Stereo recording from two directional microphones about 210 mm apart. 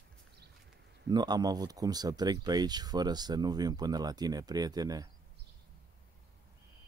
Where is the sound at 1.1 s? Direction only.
20° right (ahead or behind).